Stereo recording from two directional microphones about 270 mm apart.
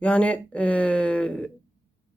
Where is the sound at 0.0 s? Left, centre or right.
Centre.